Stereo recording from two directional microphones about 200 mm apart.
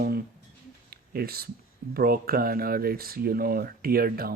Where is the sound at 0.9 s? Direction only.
50° right (ahead or behind).